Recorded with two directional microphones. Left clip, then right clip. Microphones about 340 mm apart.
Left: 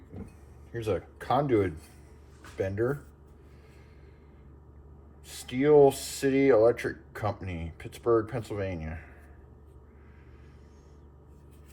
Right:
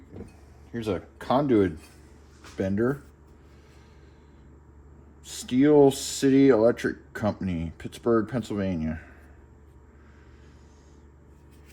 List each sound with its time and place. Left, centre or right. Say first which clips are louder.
0.8 s speech: right 1 dB; right
5.3 s speech: right 2 dB; right